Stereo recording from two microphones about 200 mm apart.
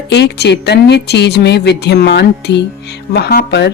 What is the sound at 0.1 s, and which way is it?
A woman's voice, 60° left (ahead or behind).